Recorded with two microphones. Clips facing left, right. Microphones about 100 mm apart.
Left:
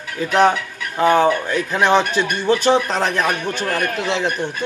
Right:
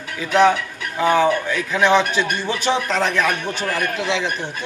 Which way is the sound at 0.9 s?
45° left (ahead or behind).